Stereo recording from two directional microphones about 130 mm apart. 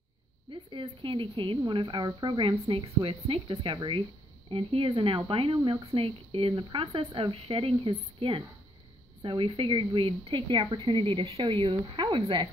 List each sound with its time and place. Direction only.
0.5 s a woman's voice: 40° right (ahead or behind)